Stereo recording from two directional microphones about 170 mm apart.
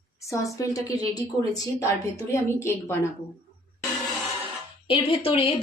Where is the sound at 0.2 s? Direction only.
20° left (ahead or behind).